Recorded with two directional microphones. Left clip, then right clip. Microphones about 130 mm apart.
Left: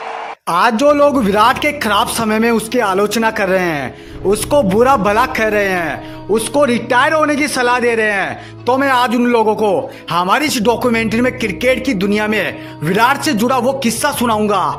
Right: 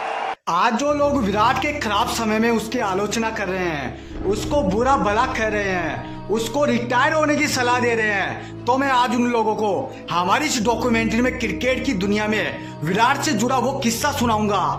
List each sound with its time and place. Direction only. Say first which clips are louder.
0.4 s a man's voice: left 8 dB; 45° left (ahead or behind)